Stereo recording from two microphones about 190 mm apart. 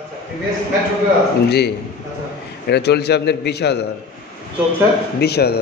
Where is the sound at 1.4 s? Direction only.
60° left (ahead or behind).